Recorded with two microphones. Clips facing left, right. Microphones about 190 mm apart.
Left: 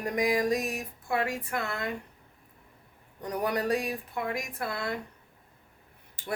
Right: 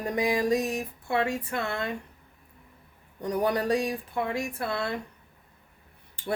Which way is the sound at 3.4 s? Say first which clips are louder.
Right 3 dB; 30° right (ahead or behind).